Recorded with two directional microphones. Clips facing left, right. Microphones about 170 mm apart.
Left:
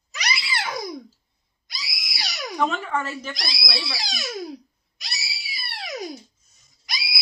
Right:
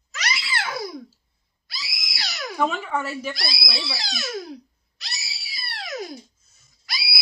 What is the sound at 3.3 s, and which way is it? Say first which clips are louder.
Speech: even; 15° left (ahead or behind).